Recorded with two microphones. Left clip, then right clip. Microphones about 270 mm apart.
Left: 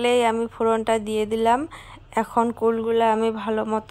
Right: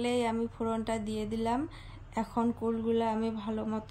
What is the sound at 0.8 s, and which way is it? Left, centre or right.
Speech, centre.